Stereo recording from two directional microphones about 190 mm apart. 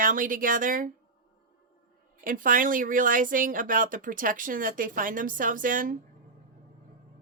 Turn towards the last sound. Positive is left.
turn(degrees=-45)  # may be behind; listen again after turning